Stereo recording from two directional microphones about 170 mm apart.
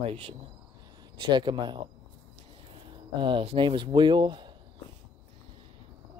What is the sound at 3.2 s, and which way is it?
Speech, 35° right (ahead or behind).